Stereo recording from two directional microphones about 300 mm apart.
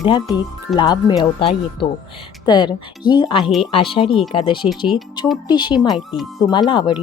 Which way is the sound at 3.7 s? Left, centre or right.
Centre.